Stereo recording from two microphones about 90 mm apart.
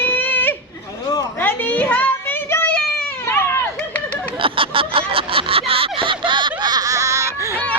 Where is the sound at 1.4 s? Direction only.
20° left (ahead or behind).